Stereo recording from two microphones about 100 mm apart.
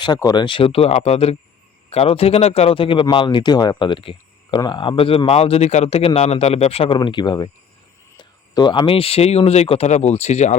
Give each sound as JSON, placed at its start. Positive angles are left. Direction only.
{"t": 0.3, "sound": "a man's voice", "side_deg": 55}
{"t": 1.9, "sound": "a man's voice", "side_deg": 80}
{"t": 6.9, "sound": "speech", "side_deg": 50}